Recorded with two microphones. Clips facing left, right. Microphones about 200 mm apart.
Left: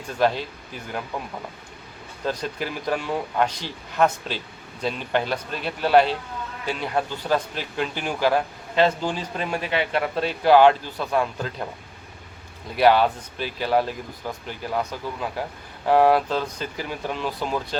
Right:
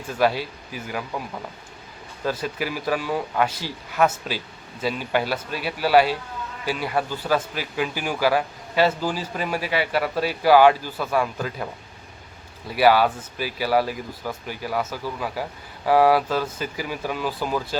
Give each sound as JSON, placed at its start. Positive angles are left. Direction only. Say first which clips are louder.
{"t": 0.1, "sound": "speech", "louder": "right 1 dB", "side_deg": -10}
{"t": 2.2, "sound": "speech", "louder": "right 1 dB", "side_deg": -5}
{"t": 12.7, "sound": "speech", "louder": "even", "side_deg": -5}